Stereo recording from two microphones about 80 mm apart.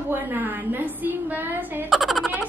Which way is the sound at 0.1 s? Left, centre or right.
Right.